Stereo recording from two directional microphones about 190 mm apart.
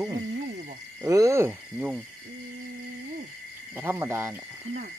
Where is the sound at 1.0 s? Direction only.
15° right (ahead or behind).